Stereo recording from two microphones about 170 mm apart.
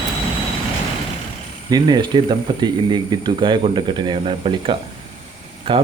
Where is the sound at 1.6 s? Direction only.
25° right (ahead or behind).